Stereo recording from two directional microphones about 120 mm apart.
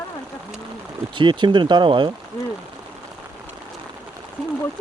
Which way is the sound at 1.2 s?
40° right (ahead or behind).